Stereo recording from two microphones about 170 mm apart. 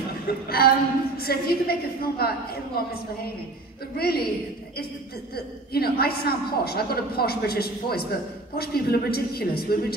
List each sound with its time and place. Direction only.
0.5 s a woman's voice: 65° left (ahead or behind)
4.0 s a woman's voice: 65° left (ahead or behind)
5.3 s a woman's voice: 65° left (ahead or behind)